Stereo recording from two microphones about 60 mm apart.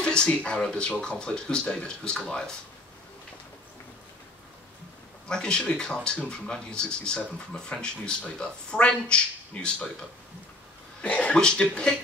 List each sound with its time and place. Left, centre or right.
0.0 s speech: centre
5.3 s speech: centre
11.0 s speech: centre